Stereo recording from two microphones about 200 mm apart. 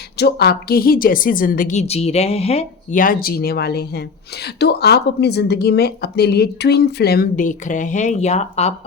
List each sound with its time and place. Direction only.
0.2 s speech: 55° left (ahead or behind); by 8.7 s 35° left (ahead or behind)